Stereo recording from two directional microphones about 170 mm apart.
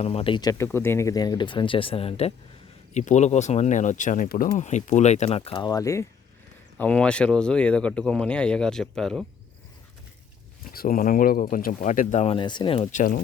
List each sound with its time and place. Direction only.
0.0 s speech: 35° left (ahead or behind); by 4.4 s 55° left (ahead or behind)
4.5 s speech: 45° left (ahead or behind)
5.4 s speech: 25° left (ahead or behind)
6.7 s speech: 5° left (ahead or behind)
10.7 s speech: 55° left (ahead or behind); by 12.9 s 30° left (ahead or behind)
12.9 s speech: 50° left (ahead or behind)